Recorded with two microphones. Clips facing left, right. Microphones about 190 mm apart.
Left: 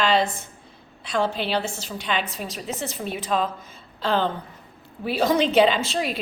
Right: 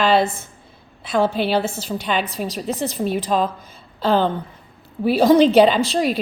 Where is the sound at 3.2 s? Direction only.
35° right (ahead or behind).